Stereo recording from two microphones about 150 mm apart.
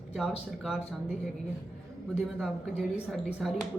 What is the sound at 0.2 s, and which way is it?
Speech, centre (ahead or behind).